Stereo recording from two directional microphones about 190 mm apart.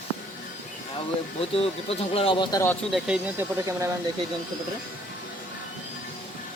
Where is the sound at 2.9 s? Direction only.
5° right (ahead or behind).